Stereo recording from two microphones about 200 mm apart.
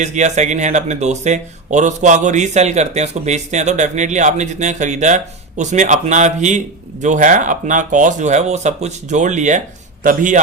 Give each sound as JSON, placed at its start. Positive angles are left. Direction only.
{"t": 0.0, "sound": "speech", "side_deg": -35}